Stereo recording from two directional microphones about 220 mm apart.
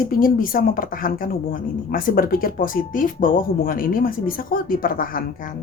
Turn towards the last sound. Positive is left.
turn(degrees=40)  # may be behind; listen again after turning